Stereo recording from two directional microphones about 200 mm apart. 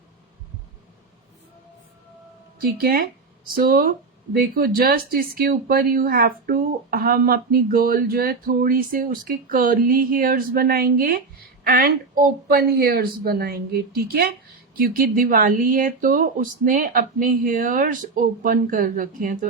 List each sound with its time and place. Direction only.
2.6 s speech: 50° right (ahead or behind)